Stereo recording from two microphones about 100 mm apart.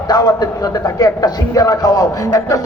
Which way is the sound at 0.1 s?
45° left (ahead or behind).